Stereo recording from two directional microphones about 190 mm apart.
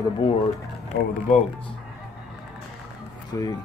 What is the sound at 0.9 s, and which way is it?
Speech, 55° left (ahead or behind).